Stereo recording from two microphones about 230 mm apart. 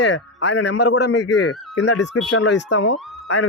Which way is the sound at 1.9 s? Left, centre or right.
Left.